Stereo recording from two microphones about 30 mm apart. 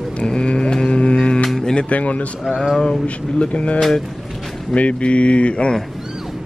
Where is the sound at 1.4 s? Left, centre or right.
Centre.